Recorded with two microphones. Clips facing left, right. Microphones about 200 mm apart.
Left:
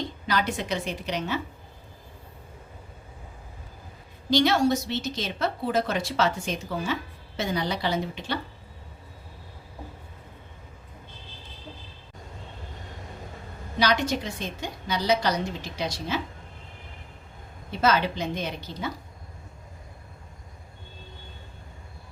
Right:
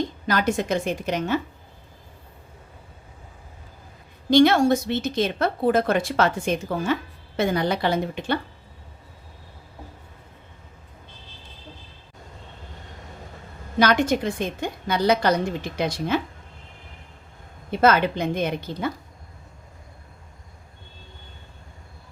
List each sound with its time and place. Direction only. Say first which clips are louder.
0.3 s a woman's voice: right 4 dB; 45° right (ahead or behind)
4.3 s a woman's voice: right 5 dB; 55° right (ahead or behind)
13.7 s a woman's voice: right 5 dB; 50° right (ahead or behind)
17.7 s a woman's voice: right 5 dB; 55° right (ahead or behind)